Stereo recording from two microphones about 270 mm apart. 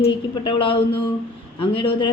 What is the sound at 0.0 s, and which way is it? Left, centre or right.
Speech, centre.